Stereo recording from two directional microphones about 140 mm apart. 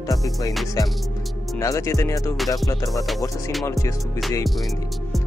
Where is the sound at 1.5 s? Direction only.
20° left (ahead or behind).